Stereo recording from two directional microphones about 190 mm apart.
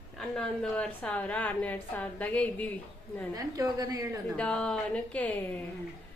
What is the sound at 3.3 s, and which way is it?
Speech, 20° right (ahead or behind).